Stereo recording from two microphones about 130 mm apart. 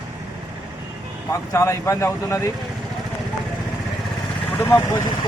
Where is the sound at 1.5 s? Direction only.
20° left (ahead or behind).